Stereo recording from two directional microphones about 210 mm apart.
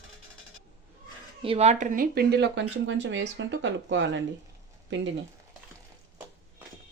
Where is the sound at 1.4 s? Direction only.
30° right (ahead or behind); by 4.2 s 60° right (ahead or behind).